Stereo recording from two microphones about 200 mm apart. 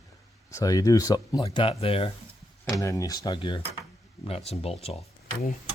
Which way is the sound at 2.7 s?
15° left (ahead or behind).